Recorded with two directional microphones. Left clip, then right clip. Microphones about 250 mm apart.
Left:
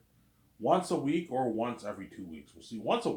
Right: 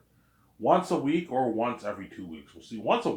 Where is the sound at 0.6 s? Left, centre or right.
Centre.